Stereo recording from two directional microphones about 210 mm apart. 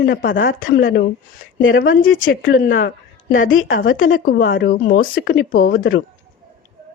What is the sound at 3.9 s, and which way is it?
Speech, 70° left (ahead or behind).